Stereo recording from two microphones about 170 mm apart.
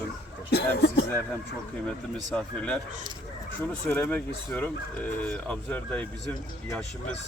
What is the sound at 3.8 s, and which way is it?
Speech, 10° left (ahead or behind).